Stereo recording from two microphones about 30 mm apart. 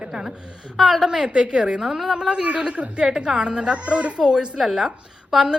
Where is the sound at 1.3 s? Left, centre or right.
Right.